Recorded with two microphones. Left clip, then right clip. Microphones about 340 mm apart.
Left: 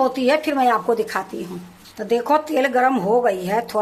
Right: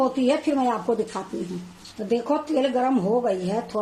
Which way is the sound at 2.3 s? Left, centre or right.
Left.